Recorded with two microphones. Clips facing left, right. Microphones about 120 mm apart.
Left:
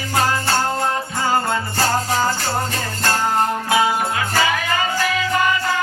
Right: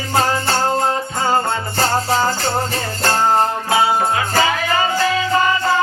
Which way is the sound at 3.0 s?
30° right (ahead or behind).